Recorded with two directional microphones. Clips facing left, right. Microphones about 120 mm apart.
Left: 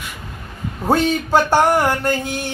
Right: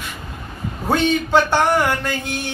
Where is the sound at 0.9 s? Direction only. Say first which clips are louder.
Left 1 dB; 40° left (ahead or behind).